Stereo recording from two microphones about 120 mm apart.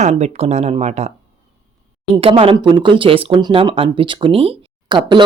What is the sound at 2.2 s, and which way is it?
Speech, 50° right (ahead or behind).